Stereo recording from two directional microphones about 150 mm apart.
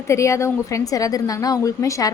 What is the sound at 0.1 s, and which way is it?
A woman's voice, 20° left (ahead or behind).